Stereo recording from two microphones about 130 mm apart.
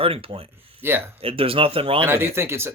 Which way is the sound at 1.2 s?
45° right (ahead or behind).